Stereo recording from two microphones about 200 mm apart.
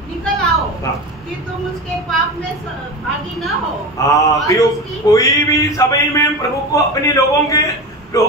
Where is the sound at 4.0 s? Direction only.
15° left (ahead or behind).